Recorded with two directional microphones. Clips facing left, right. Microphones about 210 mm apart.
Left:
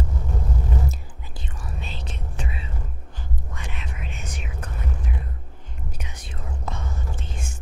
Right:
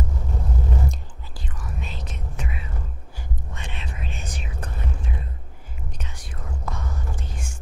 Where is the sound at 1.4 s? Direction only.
30° left (ahead or behind).